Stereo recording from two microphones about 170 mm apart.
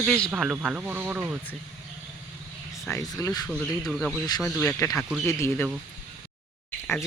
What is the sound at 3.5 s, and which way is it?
Speech, centre (ahead or behind).